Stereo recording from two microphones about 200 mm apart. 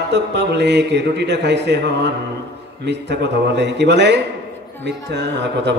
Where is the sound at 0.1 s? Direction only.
60° right (ahead or behind).